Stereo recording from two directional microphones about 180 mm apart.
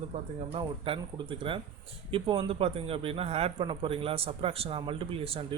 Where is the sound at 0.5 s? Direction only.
30° right (ahead or behind).